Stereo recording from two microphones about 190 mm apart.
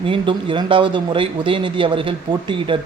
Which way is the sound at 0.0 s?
25° right (ahead or behind).